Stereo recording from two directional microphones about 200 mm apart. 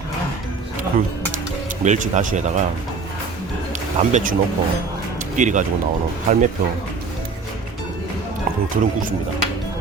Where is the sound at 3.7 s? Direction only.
40° right (ahead or behind).